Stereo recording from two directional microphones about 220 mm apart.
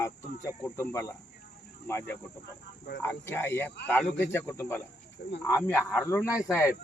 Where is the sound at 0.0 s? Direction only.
10° left (ahead or behind).